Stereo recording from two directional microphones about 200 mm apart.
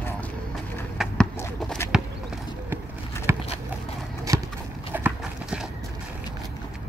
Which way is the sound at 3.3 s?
15° right (ahead or behind).